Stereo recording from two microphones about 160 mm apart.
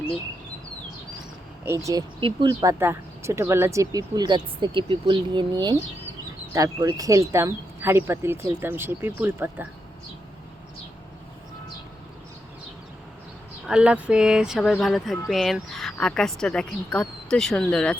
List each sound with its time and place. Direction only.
1.6 s speech: 15° right (ahead or behind)
2.7 s speech: 15° right (ahead or behind)
13.7 s speech: 5° right (ahead or behind)